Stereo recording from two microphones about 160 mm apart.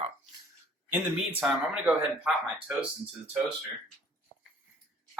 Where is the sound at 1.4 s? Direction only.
5° right (ahead or behind).